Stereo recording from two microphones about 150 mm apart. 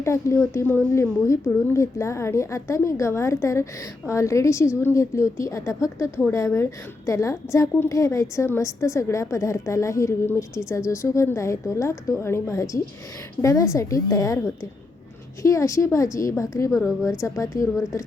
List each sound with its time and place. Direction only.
0.0 s a woman's voice: 20° left (ahead or behind)
16.7 s a woman's voice: 5° right (ahead or behind)
17.2 s a woman's voice: 20° left (ahead or behind)